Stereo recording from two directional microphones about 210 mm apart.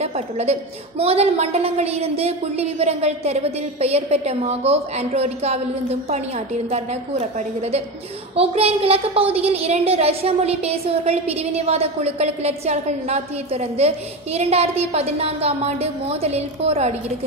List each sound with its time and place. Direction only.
0.0 s a woman's voice: 30° right (ahead or behind)